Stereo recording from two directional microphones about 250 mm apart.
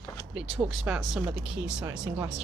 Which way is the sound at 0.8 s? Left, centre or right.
Centre.